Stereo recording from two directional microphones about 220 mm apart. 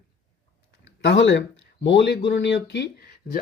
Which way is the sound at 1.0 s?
55° left (ahead or behind).